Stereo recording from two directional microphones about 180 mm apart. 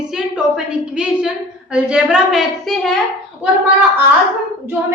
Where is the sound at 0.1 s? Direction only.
5° right (ahead or behind).